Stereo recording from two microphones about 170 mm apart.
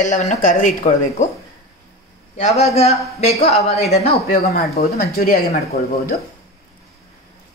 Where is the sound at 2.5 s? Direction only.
40° left (ahead or behind).